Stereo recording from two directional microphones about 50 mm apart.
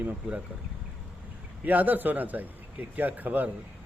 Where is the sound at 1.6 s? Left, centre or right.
Right.